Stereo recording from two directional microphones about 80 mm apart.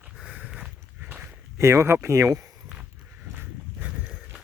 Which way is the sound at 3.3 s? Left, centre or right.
Right.